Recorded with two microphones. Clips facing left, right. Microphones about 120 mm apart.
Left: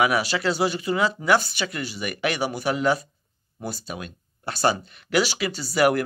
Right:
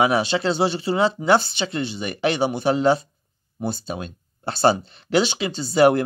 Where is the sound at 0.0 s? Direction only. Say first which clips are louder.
Right 3 dB; 25° right (ahead or behind).